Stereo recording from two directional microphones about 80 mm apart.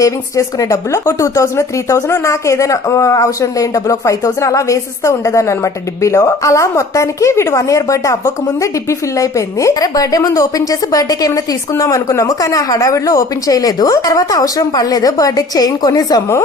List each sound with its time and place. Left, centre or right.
0.0 s a woman's voice: left